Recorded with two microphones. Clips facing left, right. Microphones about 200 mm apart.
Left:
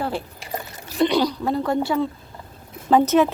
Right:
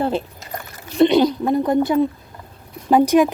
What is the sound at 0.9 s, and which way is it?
A woman's voice, 20° right (ahead or behind).